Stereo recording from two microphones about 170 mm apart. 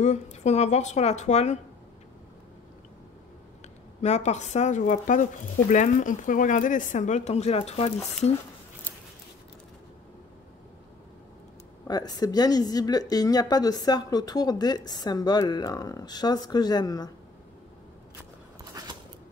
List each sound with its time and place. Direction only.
0.0 s speech: 45° left (ahead or behind)
4.0 s speech: 40° left (ahead or behind)
11.9 s a woman's voice: 25° left (ahead or behind)
18.8 s a sound: 20° right (ahead or behind)